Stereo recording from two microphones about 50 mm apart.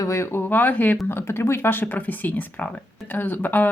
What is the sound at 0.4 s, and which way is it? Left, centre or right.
Speech, left.